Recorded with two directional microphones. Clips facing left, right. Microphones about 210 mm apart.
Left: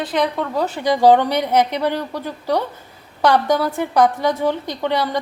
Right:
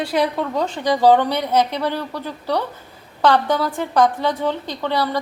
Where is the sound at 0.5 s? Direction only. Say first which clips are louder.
Left 2 dB; 10° left (ahead or behind).